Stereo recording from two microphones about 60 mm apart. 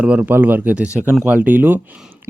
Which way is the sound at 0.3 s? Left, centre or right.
Right.